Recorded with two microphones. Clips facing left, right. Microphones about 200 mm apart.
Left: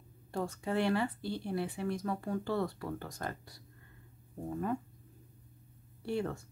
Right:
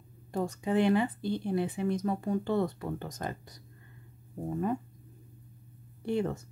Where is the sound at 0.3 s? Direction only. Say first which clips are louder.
Right 5 dB; 15° right (ahead or behind).